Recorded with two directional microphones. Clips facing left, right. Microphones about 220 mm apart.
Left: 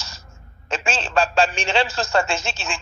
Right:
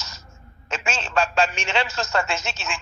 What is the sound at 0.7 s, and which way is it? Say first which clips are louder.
A man's voice: left 3 dB; 30° left (ahead or behind).